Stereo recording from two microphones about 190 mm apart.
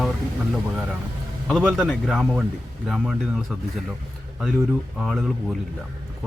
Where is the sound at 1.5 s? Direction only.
Centre (ahead or behind).